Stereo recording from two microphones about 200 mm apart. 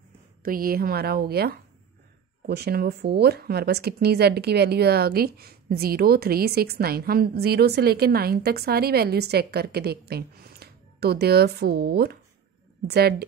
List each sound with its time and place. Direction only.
0.4 s speech: 45° right (ahead or behind)